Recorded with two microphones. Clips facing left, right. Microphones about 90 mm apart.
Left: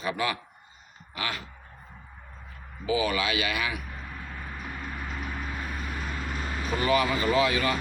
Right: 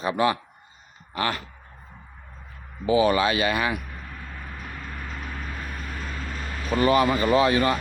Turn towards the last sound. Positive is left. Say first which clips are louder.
# right 4 dB
turn(degrees=-35)  # may be behind; listen again after turning